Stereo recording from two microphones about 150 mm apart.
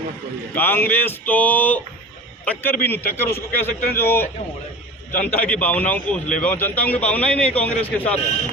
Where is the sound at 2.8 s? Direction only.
15° left (ahead or behind).